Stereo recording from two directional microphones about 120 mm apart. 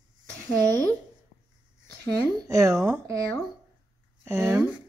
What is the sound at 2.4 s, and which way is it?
Speech, 25° right (ahead or behind).